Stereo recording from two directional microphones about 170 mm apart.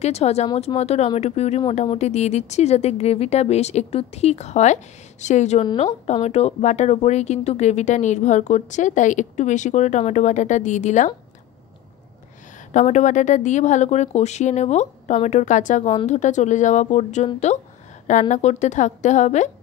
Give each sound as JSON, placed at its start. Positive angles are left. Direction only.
{"t": 0.0, "sound": "speech", "side_deg": 40}
{"t": 12.7, "sound": "speech", "side_deg": 45}
{"t": 18.3, "sound": "speech", "side_deg": 40}